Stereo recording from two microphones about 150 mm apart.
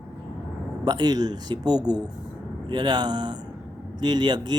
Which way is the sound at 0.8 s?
25° right (ahead or behind).